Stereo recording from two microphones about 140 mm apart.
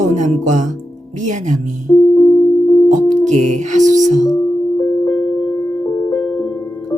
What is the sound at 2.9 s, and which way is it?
Music, 65° right (ahead or behind).